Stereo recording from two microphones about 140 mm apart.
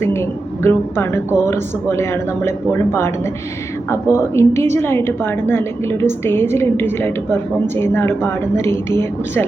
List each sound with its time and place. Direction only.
0.0 s a woman's voice: 20° left (ahead or behind)
3.8 s a woman's voice: 20° left (ahead or behind)